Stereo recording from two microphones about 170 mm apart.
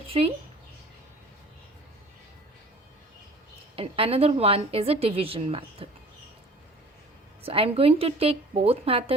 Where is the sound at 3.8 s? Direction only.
35° right (ahead or behind).